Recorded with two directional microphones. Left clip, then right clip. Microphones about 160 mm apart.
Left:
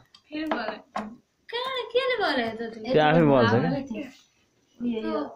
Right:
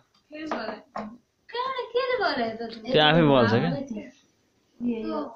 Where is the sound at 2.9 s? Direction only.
5° right (ahead or behind).